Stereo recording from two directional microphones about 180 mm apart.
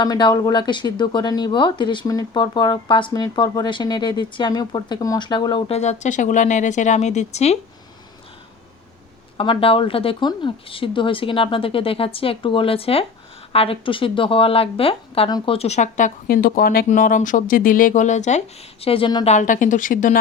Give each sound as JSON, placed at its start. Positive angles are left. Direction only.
{"t": 0.0, "sound": "speech", "side_deg": 25}
{"t": 9.4, "sound": "speech", "side_deg": 30}
{"t": 19.3, "sound": "a woman's voice", "side_deg": 45}